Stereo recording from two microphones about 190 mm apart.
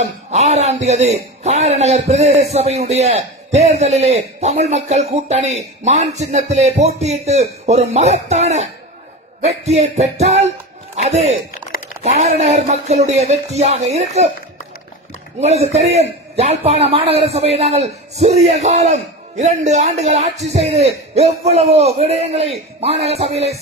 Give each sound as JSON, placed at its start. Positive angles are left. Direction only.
{"t": 0.0, "sound": "a man's voice", "side_deg": -35}
{"t": 15.4, "sound": "a man's voice", "side_deg": -35}